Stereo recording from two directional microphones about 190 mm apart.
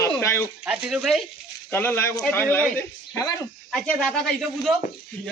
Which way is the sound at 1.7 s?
10° left (ahead or behind).